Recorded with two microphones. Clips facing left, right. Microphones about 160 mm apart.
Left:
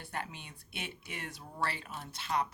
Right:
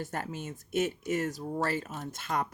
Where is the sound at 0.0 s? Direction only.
45° right (ahead or behind).